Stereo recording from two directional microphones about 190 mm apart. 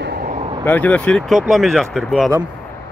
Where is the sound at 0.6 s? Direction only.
10° left (ahead or behind).